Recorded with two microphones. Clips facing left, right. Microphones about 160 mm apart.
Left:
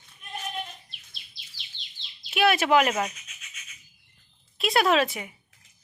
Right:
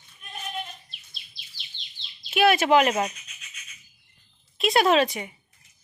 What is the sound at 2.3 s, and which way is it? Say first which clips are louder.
Bird: right 2 dB; centre (ahead or behind).